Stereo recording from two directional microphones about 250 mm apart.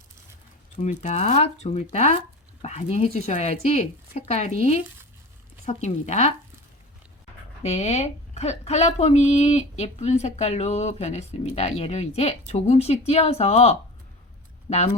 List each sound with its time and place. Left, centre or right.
0.8 s speech: left
7.6 s speech: left